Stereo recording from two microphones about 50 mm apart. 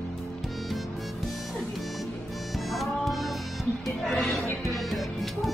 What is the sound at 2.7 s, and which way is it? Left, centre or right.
Music, centre.